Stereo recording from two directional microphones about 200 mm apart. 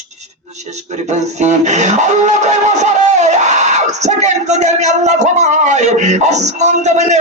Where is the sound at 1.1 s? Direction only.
35° right (ahead or behind).